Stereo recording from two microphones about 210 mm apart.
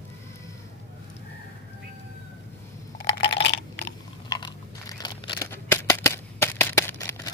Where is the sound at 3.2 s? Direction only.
55° left (ahead or behind).